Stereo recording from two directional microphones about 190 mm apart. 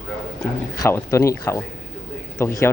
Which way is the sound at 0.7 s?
15° left (ahead or behind).